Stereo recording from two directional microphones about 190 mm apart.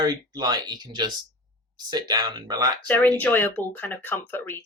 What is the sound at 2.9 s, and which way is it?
Speech, 10° left (ahead or behind).